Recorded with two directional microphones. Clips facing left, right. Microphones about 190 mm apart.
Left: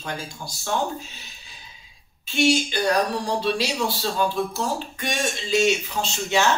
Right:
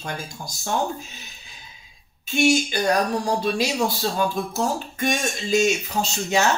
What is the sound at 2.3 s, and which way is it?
Speech, 45° right (ahead or behind).